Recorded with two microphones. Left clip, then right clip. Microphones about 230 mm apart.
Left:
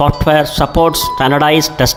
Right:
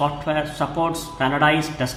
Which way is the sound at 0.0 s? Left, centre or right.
Left.